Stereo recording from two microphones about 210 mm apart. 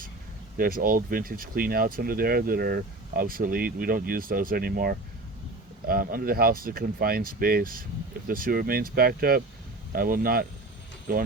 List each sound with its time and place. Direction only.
0.5 s speech: 40° right (ahead or behind)